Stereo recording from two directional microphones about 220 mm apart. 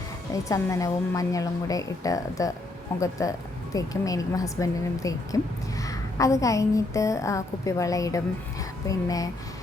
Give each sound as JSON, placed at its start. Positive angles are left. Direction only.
{"t": 0.4, "sound": "a woman's voice", "side_deg": 15}